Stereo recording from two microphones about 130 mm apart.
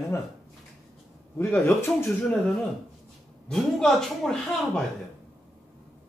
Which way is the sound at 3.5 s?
5° left (ahead or behind).